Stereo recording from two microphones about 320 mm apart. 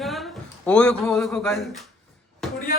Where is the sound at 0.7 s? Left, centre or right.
Centre.